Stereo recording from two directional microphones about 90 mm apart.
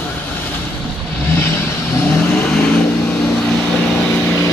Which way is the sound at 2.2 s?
15° left (ahead or behind).